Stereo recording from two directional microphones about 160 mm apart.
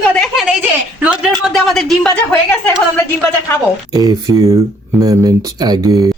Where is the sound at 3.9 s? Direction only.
20° right (ahead or behind).